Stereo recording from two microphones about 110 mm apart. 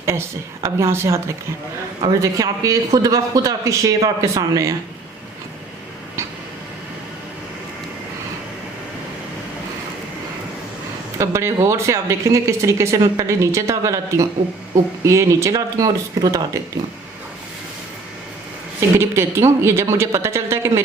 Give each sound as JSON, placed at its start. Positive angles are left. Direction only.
{"t": 0.0, "sound": "a man's voice", "side_deg": -25}
{"t": 11.2, "sound": "speech", "side_deg": -25}
{"t": 18.9, "sound": "speech", "side_deg": -25}